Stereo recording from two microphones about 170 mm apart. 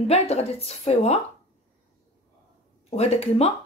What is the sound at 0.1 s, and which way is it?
Speech, 40° left (ahead or behind).